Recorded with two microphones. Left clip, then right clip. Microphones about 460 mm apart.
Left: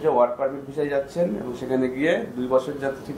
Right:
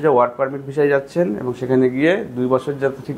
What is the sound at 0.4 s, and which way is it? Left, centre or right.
Speech, right.